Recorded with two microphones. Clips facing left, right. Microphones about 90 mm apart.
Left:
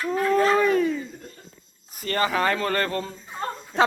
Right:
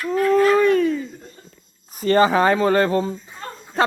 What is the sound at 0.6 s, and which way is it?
Speech, 5° left (ahead or behind).